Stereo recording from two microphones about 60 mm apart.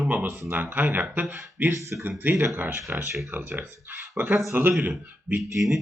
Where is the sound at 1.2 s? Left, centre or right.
Centre.